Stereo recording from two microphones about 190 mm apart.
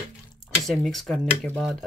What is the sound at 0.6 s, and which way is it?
Speech, centre (ahead or behind).